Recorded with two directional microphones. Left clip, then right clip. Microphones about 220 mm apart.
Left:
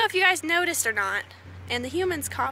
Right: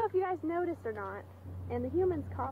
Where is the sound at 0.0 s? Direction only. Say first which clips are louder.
Left 10 dB; 25° left (ahead or behind).